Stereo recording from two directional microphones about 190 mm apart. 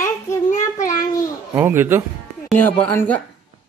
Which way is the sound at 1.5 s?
10° right (ahead or behind).